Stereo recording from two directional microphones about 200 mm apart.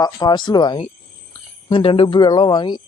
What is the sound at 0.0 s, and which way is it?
Speech, 20° left (ahead or behind).